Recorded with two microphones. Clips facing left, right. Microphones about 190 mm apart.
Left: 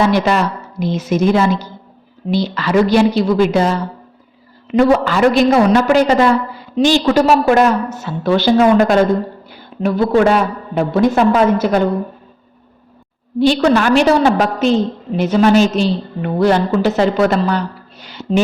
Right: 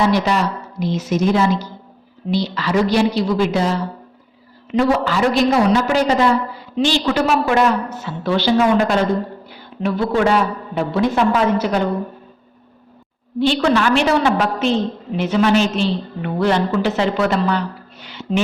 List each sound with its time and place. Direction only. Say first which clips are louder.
0.1 s a man's voice: left 3 dB; 55° left (ahead or behind)
4.7 s a man's voice: left 4 dB; 55° left (ahead or behind)
13.5 s a woman's voice: left 3 dB; 40° left (ahead or behind)
18.0 s music: left 4 dB; 40° left (ahead or behind)